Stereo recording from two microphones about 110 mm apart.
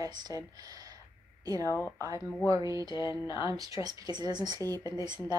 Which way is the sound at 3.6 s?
35° right (ahead or behind).